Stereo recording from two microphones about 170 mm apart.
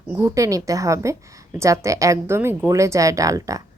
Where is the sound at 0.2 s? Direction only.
15° right (ahead or behind).